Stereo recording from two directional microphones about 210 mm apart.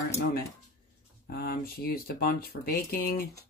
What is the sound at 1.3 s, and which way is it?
Speech, 45° left (ahead or behind).